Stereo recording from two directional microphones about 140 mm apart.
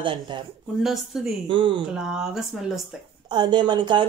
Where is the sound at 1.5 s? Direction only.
35° right (ahead or behind).